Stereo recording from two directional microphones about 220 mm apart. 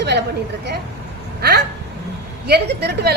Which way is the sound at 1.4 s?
45° right (ahead or behind).